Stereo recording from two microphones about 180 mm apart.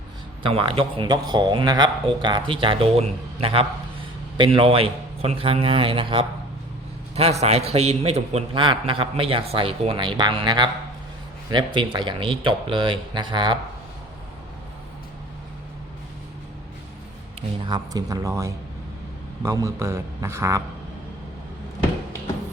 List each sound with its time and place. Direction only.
0.4 s a man's voice: 30° right (ahead or behind)
17.7 s a man's voice: 20° right (ahead or behind)